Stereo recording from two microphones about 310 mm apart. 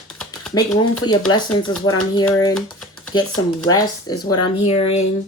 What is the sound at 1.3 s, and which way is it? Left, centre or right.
Speech, centre.